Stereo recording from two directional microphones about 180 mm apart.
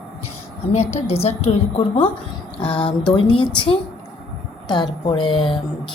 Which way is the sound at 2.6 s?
30° left (ahead or behind).